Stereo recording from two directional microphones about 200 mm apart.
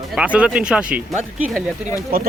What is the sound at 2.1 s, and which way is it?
Speech, 50° right (ahead or behind).